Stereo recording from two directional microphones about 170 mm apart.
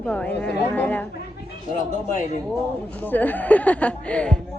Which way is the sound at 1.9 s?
45° left (ahead or behind).